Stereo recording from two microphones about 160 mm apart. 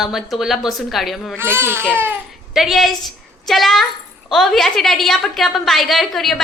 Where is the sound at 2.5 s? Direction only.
Centre (ahead or behind).